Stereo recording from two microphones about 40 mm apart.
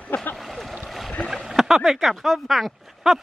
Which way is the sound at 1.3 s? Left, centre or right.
Centre.